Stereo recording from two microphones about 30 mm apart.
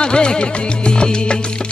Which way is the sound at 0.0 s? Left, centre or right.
Left.